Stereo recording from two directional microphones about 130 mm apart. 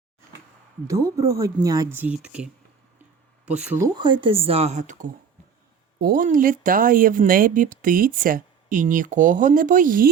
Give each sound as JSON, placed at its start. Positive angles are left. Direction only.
{"t": 0.9, "sound": "speech", "side_deg": -25}
{"t": 1.9, "sound": "speech", "side_deg": -10}
{"t": 3.9, "sound": "speech", "side_deg": -35}
{"t": 6.0, "sound": "speech", "side_deg": -90}